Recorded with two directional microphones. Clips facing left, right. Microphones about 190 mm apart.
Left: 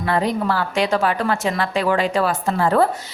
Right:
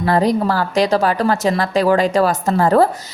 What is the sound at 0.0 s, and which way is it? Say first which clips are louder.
A woman's voice: right 5 dB; 40° right (ahead or behind).